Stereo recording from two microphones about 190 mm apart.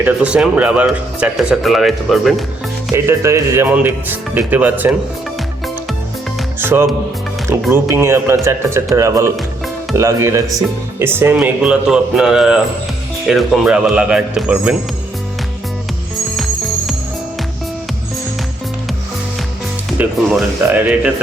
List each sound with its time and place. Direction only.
0.0 s speech: 5° right (ahead or behind)
2.9 s speech: 15° right (ahead or behind)
6.6 s speech: 10° right (ahead or behind)
20.0 s speech: 10° right (ahead or behind)